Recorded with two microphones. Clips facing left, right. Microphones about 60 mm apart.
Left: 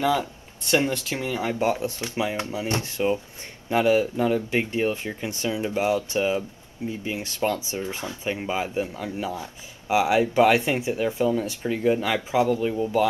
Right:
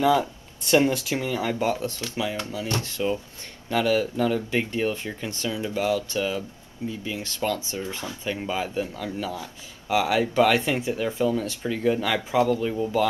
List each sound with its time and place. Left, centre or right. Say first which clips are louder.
0.8 s speech: right 3 dB; centre
1.1 s speech: right 1 dB; left